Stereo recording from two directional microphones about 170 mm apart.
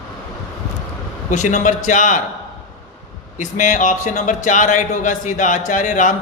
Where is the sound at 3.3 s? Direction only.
45° left (ahead or behind).